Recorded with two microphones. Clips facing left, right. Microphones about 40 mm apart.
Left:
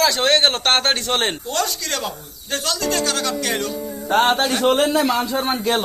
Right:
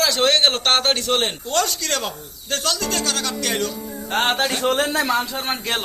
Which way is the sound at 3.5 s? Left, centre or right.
Left.